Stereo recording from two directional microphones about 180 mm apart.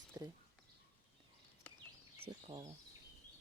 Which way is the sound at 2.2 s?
25° right (ahead or behind).